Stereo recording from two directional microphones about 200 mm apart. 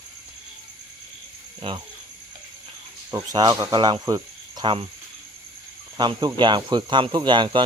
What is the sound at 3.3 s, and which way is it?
Speech, 20° right (ahead or behind).